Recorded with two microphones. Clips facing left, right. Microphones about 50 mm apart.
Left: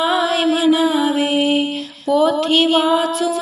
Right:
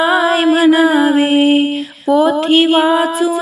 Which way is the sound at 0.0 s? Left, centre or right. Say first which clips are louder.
Right 5 dB; right.